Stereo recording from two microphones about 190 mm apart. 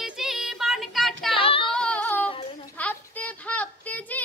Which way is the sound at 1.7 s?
5° left (ahead or behind).